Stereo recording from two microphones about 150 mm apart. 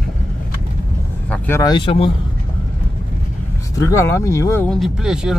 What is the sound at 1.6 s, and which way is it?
Speech, 30° left (ahead or behind).